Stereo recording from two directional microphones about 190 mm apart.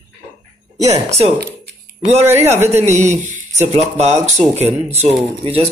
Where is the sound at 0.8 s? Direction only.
35° right (ahead or behind).